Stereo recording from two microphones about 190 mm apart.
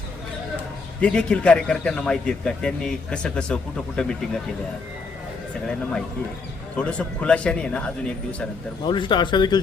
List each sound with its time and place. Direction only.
1.0 s a man's voice: 5° left (ahead or behind)
6.7 s a man's voice: 5° left (ahead or behind)
8.8 s speech: 25° left (ahead or behind)